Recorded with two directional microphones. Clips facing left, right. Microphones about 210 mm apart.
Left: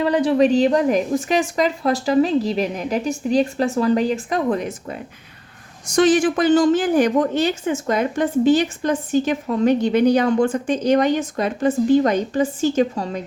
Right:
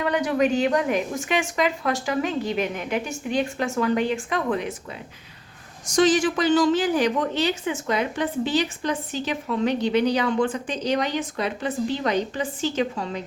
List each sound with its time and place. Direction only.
0.0 s speech: 30° left (ahead or behind)
6.0 s a woman's voice: 55° left (ahead or behind)